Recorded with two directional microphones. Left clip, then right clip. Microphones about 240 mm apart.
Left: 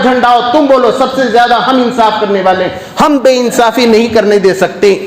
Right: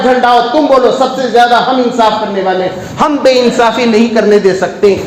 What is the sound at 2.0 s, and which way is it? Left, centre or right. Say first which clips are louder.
A man's voice: left 2 dB; left.